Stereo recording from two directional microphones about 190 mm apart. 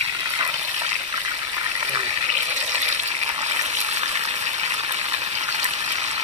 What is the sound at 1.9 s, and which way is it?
Water, 35° right (ahead or behind).